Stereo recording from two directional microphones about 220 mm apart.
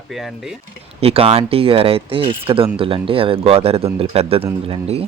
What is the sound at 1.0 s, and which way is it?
Speech, 25° right (ahead or behind).